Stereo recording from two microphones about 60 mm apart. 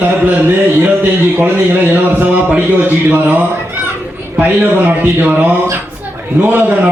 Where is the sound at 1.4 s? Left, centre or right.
Right.